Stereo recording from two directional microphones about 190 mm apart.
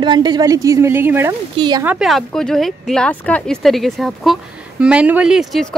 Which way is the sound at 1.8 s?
5° right (ahead or behind).